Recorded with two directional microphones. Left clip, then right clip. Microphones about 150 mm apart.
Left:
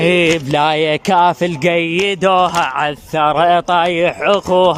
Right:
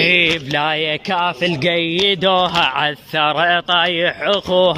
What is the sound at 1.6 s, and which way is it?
Speech, 10° left (ahead or behind).